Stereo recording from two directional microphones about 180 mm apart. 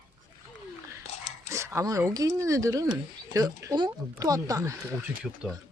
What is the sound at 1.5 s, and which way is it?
Speech, 15° right (ahead or behind).